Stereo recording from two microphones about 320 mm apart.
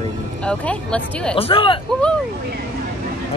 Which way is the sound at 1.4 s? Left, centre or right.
Centre.